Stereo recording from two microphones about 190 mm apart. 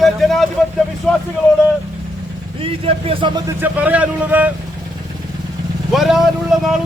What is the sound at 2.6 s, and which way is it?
Speech, 30° right (ahead or behind).